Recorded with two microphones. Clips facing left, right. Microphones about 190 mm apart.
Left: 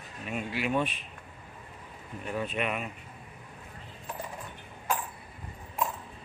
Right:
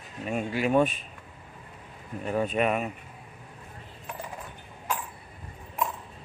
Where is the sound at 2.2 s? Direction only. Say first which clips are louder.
Right 6 dB; 45° right (ahead or behind).